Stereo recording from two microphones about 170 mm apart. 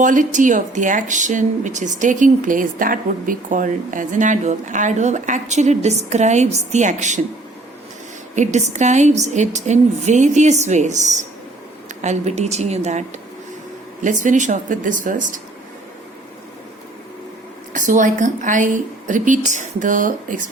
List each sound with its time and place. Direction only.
0.0 s speech: 50° right (ahead or behind)
8.4 s a woman's voice: 45° right (ahead or behind)
17.7 s speech: 50° right (ahead or behind)